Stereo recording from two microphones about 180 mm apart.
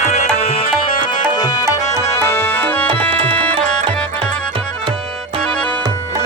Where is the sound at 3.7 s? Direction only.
5° left (ahead or behind).